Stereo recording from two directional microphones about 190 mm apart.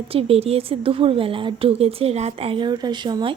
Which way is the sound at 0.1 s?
30° right (ahead or behind).